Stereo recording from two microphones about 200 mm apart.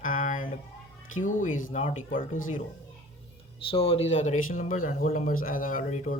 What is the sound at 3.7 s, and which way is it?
Speech, 30° left (ahead or behind).